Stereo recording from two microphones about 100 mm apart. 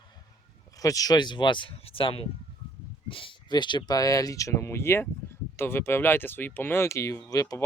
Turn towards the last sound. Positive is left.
turn(degrees=35)  # may be behind; listen again after turning